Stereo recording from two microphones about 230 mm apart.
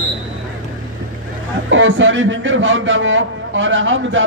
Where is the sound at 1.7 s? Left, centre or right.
Right.